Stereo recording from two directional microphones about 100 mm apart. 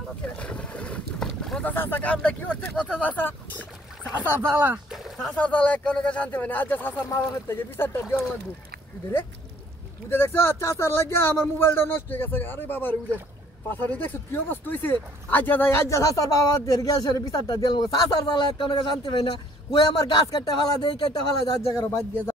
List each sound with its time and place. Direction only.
0.2 s speech: 10° left (ahead or behind)
1.7 s speech: 20° left (ahead or behind)
4.2 s speech: 25° right (ahead or behind)
4.9 s a sound: centre (ahead or behind)
5.3 s speech: 10° left (ahead or behind)
10.0 s speech: 25° left (ahead or behind); by 18.4 s 40° left (ahead or behind)
18.6 s a man's voice: 55° left (ahead or behind)
20.5 s a man's voice: 50° left (ahead or behind)
21.6 s speech: 20° left (ahead or behind)